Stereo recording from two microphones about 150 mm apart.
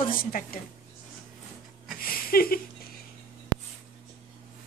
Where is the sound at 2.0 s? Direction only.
80° left.